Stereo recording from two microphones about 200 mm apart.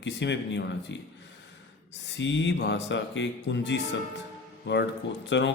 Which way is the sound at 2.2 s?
65° left (ahead or behind).